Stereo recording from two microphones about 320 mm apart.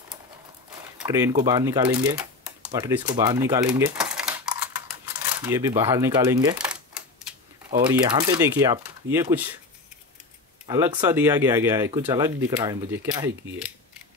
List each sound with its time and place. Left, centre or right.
0.7 s typewriter: centre
5.4 s speech: centre
7.7 s speech: centre
10.7 s speech: centre